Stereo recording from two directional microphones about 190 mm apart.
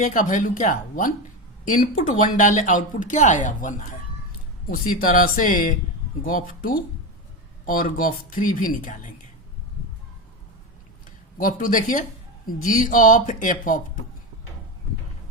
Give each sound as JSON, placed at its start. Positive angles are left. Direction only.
{"t": 0.0, "sound": "speech", "side_deg": 45}
{"t": 11.3, "sound": "speech", "side_deg": 45}